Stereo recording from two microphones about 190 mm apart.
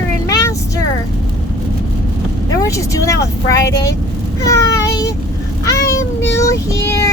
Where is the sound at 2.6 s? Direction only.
15° left (ahead or behind).